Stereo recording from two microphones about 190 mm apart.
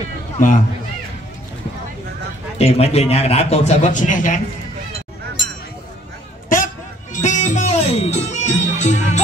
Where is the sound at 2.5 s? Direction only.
35° left (ahead or behind).